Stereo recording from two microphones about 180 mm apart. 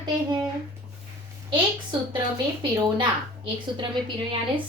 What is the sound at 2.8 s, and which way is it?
Speech, 25° right (ahead or behind).